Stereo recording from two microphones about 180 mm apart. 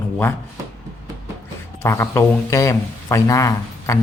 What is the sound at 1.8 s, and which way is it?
A man's voice, 15° left (ahead or behind).